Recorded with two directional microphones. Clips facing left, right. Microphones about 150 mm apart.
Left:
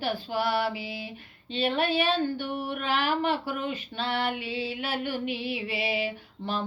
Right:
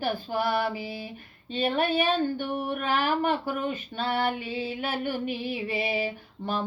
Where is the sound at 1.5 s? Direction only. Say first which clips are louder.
Right 1 dB; 45° right (ahead or behind).